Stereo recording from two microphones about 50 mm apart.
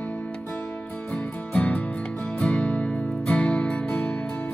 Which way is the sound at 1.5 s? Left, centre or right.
Left.